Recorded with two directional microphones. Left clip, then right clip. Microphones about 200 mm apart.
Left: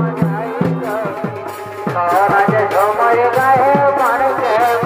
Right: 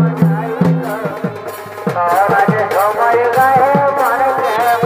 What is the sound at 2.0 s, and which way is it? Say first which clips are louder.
Music: right 1 dB; 30° left (ahead or behind).